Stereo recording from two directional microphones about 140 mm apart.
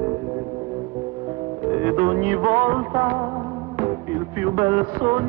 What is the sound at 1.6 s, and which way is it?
Music, 30° right (ahead or behind).